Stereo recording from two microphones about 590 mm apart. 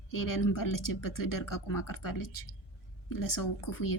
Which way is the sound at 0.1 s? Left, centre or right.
Left.